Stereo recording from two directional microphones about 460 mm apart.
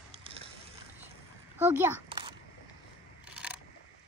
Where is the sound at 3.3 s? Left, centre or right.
Centre.